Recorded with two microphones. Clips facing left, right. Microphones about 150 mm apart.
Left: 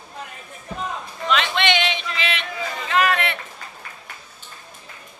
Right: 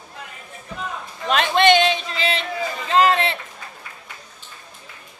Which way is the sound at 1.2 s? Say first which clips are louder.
Right 5 dB; 45° right (ahead or behind).